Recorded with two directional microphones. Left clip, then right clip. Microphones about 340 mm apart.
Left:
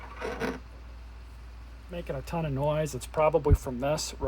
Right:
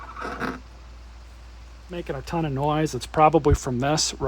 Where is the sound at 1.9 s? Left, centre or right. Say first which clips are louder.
Right 5 dB; right.